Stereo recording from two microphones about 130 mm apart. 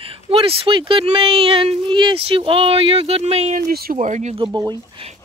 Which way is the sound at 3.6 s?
75° right (ahead or behind).